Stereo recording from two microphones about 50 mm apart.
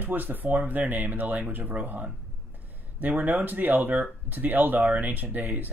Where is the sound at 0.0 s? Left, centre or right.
Right.